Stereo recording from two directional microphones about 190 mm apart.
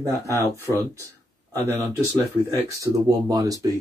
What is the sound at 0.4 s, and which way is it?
Speech, 15° right (ahead or behind).